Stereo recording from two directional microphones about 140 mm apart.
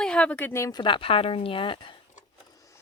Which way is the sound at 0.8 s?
35° left (ahead or behind).